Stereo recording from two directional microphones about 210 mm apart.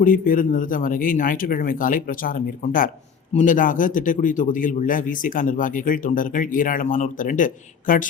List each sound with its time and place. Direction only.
0.0 s a man's voice: 40° left (ahead or behind)